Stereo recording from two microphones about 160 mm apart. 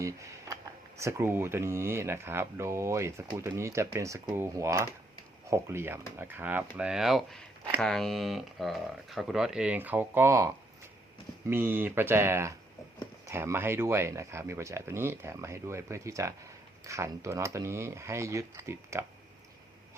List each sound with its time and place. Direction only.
0.0 s speech: 20° right (ahead or behind)